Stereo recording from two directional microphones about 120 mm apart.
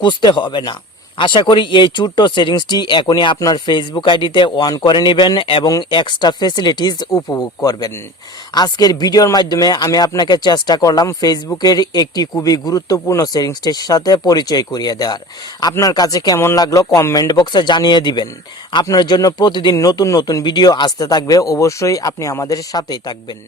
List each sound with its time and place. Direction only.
0.0 s speech: 40° left (ahead or behind)